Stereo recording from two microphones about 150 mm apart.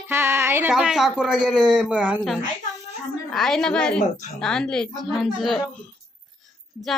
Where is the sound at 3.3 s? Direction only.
Centre (ahead or behind).